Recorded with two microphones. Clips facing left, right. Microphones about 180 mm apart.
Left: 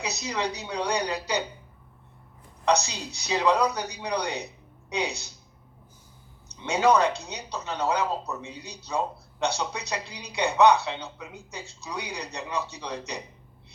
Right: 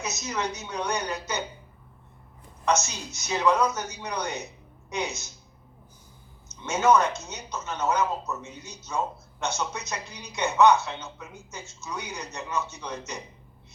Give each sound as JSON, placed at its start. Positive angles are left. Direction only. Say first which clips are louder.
{"t": 0.0, "sound": "a man's voice", "louder": "left 1 dB", "side_deg": 35}
{"t": 2.6, "sound": "a man's voice", "louder": "left 2 dB", "side_deg": 35}
{"t": 6.7, "sound": "a man's voice", "louder": "even", "side_deg": 35}